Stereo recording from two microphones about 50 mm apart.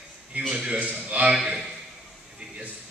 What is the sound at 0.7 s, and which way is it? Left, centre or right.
Speech, right.